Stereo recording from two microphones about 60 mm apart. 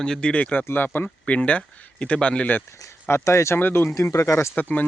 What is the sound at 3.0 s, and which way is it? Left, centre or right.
Speech, left.